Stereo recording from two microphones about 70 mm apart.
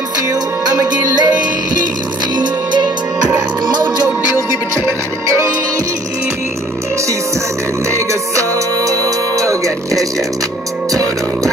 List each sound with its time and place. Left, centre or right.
0.3 s music: right
2.3 s music: right
4.8 s music: right
7.9 s music: right